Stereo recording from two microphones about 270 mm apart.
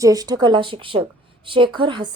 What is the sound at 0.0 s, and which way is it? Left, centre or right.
Speech, centre.